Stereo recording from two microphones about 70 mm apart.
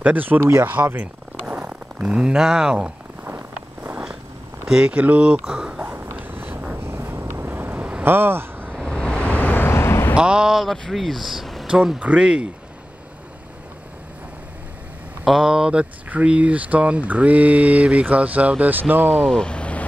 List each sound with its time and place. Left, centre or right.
0.0 s speech: right
1.5 s speech: centre
3.3 s vehicle: right
4.6 s speech: centre
5.4 s speech: centre
5.8 s a sound: right
6.8 s a sound: right
8.8 s vehicle: centre; by 10.1 s left
10.1 s speech: centre
15.2 s speech: centre; by 19.1 s right
19.1 s speech: centre